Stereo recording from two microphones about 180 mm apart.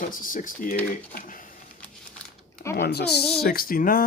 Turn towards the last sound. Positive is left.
turn(degrees=50)  # may be behind; listen again after turning